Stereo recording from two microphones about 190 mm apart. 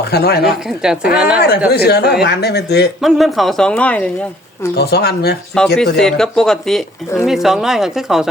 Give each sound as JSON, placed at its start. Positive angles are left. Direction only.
{"t": 0.0, "sound": "speech", "side_deg": 60}
{"t": 0.6, "sound": "speech", "side_deg": -5}
{"t": 1.4, "sound": "speech", "side_deg": 55}
{"t": 3.0, "sound": "speech", "side_deg": 0}
{"t": 4.8, "sound": "speech", "side_deg": 55}
{"t": 5.5, "sound": "speech", "side_deg": 0}